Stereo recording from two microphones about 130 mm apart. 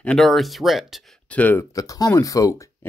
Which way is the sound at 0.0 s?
5° left (ahead or behind).